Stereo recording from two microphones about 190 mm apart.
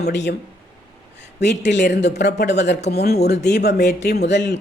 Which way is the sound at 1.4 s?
65° left (ahead or behind).